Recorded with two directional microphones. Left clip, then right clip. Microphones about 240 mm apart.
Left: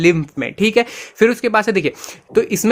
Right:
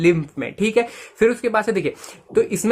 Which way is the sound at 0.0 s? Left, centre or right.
Left.